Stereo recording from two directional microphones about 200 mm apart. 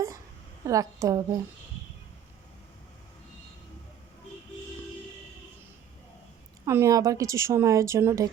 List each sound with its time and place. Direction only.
0.6 s a woman's voice: 15° right (ahead or behind)
6.7 s a woman's voice: 15° right (ahead or behind)